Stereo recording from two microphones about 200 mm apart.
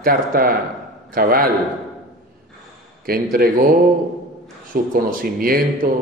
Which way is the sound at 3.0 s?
50° right (ahead or behind).